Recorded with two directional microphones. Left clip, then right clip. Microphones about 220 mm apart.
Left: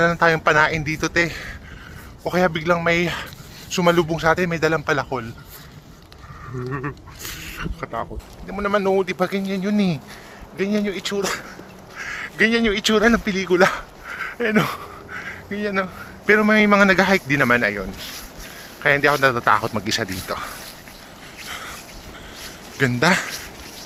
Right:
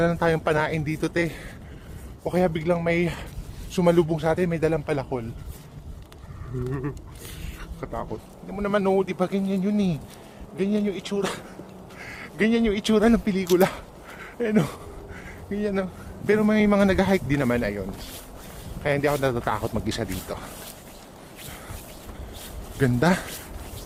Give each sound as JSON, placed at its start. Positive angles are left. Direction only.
{"t": 0.0, "sound": "a man's voice", "side_deg": -10}
{"t": 6.7, "sound": "a sound", "side_deg": -5}
{"t": 8.4, "sound": "speech", "side_deg": 5}
{"t": 11.9, "sound": "speech", "side_deg": -5}
{"t": 16.2, "sound": "a man's voice", "side_deg": -5}
{"t": 22.8, "sound": "speech", "side_deg": -25}